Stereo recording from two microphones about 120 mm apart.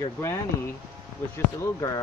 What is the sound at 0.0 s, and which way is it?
Speech, 25° left (ahead or behind).